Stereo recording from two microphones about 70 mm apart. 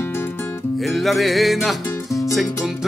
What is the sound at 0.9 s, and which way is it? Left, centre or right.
Music, centre.